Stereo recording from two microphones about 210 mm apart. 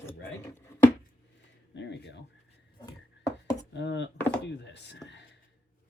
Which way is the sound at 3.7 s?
55° left (ahead or behind).